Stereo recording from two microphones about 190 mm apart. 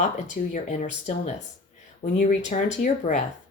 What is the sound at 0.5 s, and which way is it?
Speech, 40° left (ahead or behind).